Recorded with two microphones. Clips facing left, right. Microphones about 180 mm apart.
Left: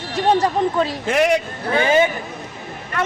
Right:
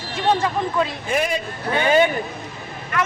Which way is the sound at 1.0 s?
90° left.